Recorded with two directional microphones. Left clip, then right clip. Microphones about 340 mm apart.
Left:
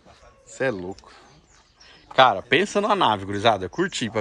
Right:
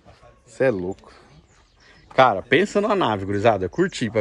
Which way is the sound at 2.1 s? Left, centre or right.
Centre.